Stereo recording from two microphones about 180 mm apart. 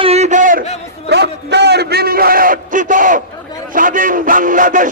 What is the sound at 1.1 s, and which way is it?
A man's voice, 70° right (ahead or behind).